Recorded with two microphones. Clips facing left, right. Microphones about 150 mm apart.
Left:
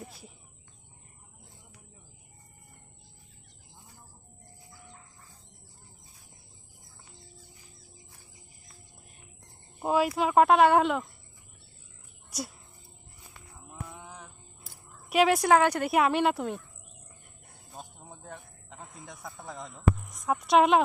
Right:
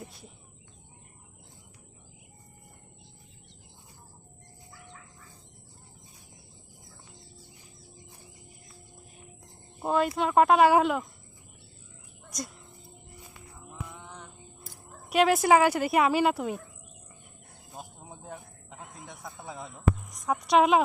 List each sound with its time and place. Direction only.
4.7 s chicken: 75° right (ahead or behind)
9.8 s a woman's voice: 5° left (ahead or behind)
13.9 s music: 10° left (ahead or behind)
15.1 s a woman's voice: centre (ahead or behind)
17.7 s a sound: 10° right (ahead or behind)
18.9 s a woman's voice: centre (ahead or behind)